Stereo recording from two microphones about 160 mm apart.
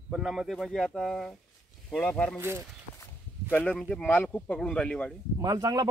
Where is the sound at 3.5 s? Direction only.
10° left (ahead or behind).